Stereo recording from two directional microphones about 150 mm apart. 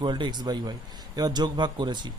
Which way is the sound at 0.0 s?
30° right (ahead or behind).